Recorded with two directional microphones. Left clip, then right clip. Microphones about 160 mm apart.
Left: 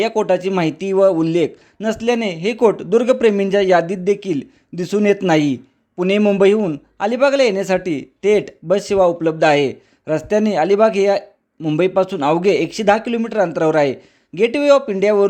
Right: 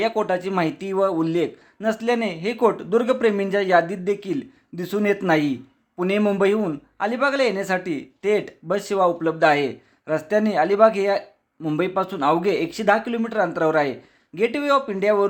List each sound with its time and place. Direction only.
0.0 s speech: 40° left (ahead or behind)